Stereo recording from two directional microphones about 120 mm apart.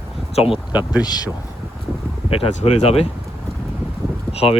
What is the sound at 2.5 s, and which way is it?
Speech, 65° left (ahead or behind).